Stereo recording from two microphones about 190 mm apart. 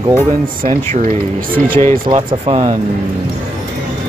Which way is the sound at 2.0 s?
30° right (ahead or behind).